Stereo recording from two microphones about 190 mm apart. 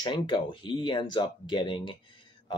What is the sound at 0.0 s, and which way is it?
Speech, 25° left (ahead or behind).